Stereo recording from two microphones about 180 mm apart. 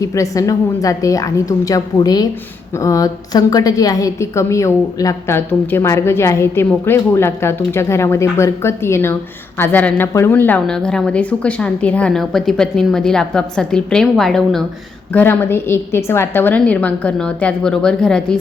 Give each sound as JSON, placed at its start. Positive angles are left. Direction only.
{"t": 0.0, "sound": "a woman's voice", "side_deg": 20}